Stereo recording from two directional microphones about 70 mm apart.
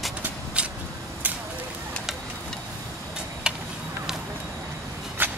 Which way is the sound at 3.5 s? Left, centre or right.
Centre.